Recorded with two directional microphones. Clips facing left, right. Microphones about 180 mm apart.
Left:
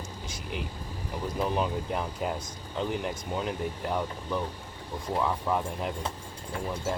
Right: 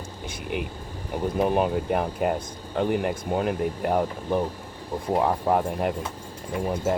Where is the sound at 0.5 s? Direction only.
55° right (ahead or behind).